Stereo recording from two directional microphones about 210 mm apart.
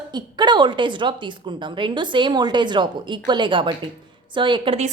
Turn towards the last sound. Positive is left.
turn(degrees=-25)  # may be behind; listen again after turning